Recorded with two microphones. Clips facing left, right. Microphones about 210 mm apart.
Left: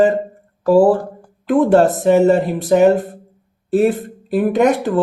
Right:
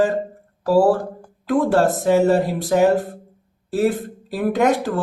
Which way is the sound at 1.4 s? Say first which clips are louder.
Left 5 dB; 20° left (ahead or behind).